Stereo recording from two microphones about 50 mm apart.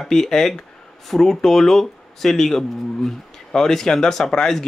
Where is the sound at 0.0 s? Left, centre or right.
Centre.